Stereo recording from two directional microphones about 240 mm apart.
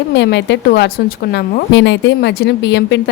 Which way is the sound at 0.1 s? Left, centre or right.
Left.